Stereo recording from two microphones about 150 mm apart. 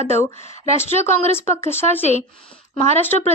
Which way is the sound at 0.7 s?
45° left (ahead or behind).